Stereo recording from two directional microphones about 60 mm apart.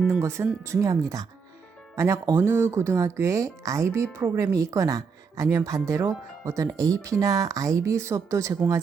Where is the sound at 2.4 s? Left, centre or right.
Right.